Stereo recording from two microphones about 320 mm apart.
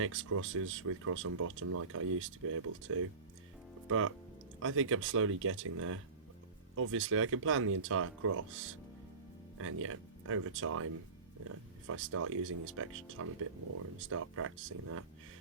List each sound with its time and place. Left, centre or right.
0.0 s speech: right